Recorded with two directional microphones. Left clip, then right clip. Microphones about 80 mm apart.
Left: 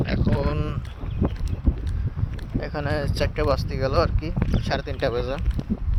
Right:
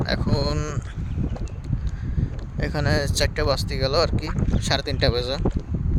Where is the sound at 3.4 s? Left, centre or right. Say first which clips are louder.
Even; right.